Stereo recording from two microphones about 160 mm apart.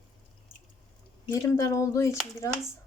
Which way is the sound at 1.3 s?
20° left (ahead or behind).